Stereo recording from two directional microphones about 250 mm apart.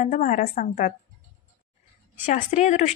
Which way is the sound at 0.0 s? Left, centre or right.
Left.